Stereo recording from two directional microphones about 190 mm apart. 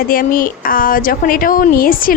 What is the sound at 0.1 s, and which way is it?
A woman's voice, 50° left (ahead or behind).